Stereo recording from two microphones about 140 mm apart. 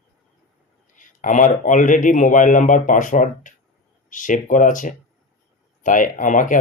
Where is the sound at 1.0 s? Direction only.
65° left (ahead or behind).